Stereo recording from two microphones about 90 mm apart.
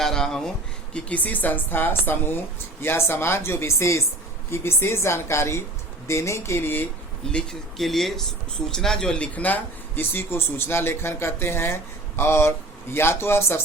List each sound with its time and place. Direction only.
0.0 s a sound: 5° left (ahead or behind)
0.9 s speech: 15° left (ahead or behind)
7.3 s speech: 5° left (ahead or behind); by 13.6 s 25° left (ahead or behind)